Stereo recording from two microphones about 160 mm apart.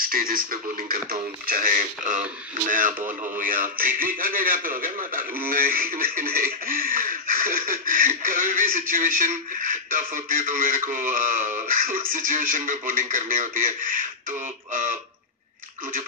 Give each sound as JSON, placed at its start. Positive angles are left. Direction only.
{"t": 0.1, "sound": "a man's voice", "side_deg": -65}
{"t": 3.3, "sound": "a man's voice", "side_deg": -55}